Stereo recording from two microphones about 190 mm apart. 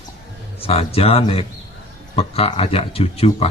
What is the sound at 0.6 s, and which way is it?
A man's voice, 30° left (ahead or behind).